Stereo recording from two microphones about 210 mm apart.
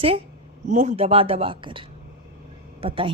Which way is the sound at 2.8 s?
25° right (ahead or behind).